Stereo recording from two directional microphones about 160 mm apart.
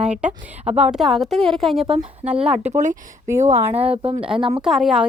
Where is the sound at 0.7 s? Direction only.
45° right (ahead or behind).